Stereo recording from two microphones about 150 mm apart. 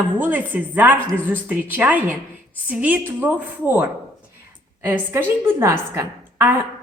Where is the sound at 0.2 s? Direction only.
10° right (ahead or behind).